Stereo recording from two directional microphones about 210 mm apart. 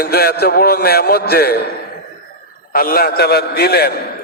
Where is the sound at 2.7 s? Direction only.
45° left (ahead or behind).